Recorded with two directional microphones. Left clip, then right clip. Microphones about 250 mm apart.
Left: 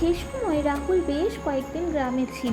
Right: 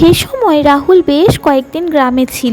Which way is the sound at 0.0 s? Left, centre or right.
Right.